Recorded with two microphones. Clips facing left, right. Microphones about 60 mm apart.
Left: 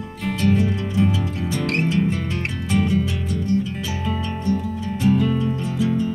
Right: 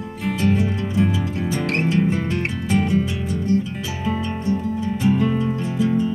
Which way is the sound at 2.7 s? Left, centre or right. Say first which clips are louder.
Right 1 dB; centre.